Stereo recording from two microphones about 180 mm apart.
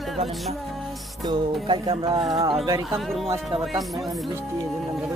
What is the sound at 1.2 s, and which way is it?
Music, 25° right (ahead or behind).